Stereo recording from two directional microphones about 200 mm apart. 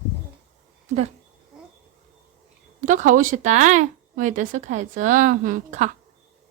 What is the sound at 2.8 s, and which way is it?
Speech, 40° right (ahead or behind).